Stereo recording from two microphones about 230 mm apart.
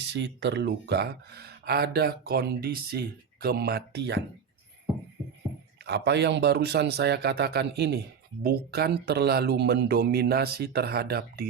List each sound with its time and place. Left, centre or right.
0.0 s speech: right
5.8 s speech: right